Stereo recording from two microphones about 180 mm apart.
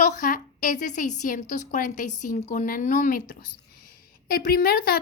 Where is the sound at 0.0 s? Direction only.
45° left (ahead or behind).